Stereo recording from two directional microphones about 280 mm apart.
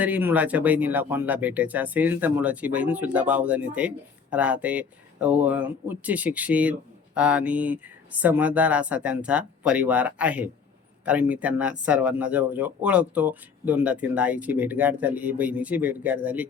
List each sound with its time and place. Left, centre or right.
0.0 s speech: centre